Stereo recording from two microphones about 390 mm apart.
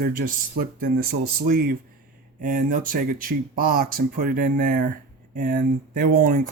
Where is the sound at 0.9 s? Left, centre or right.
Right.